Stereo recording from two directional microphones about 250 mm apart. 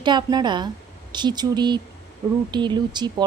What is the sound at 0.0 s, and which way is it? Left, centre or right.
Speech, centre.